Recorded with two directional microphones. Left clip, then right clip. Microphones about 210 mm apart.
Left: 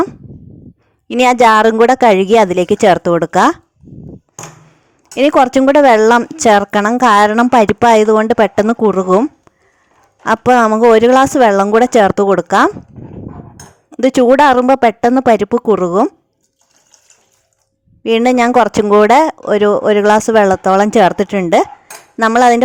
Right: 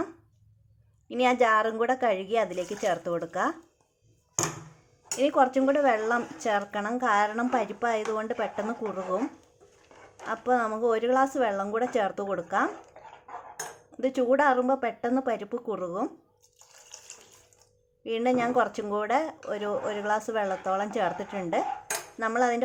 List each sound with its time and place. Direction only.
1.0 s a woman's voice: 50° left (ahead or behind)
5.1 s a woman's voice: 45° left (ahead or behind)
10.2 s a woman's voice: 50° left (ahead or behind)
13.9 s a woman's voice: 45° left (ahead or behind)
18.0 s a woman's voice: 50° left (ahead or behind)